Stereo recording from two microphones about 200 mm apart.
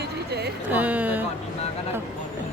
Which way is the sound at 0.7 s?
10° right (ahead or behind).